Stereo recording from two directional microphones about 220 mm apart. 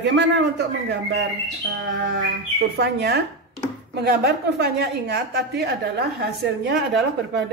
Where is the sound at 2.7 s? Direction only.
50° right (ahead or behind).